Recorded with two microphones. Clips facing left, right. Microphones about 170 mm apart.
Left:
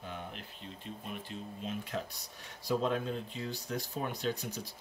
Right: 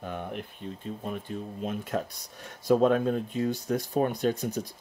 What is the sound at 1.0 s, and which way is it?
Speech, 50° right (ahead or behind).